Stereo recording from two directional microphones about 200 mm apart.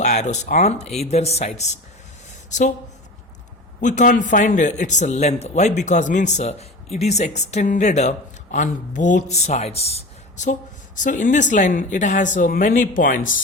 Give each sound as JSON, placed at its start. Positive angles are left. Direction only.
{"t": 0.0, "sound": "a man's voice", "side_deg": 35}
{"t": 3.8, "sound": "a man's voice", "side_deg": 40}